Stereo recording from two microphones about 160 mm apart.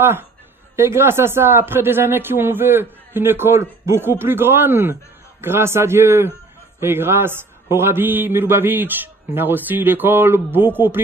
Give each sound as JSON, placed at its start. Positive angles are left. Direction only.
{"t": 0.0, "sound": "a man's voice", "side_deg": -15}